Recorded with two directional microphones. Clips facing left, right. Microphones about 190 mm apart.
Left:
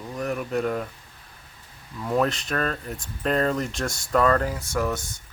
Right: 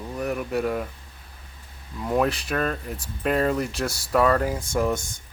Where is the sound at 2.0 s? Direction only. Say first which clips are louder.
Right 1 dB; 15° right (ahead or behind).